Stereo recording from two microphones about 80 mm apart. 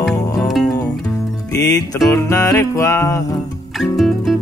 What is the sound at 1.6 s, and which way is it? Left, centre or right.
Music, left.